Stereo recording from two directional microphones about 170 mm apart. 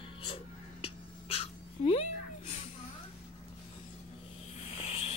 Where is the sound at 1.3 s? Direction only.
35° left (ahead or behind).